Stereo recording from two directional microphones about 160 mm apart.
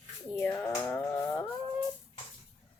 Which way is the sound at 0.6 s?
15° left (ahead or behind).